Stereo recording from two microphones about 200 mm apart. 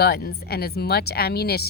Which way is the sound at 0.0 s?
50° left (ahead or behind).